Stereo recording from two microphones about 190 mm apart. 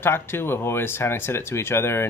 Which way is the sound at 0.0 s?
10° left (ahead or behind).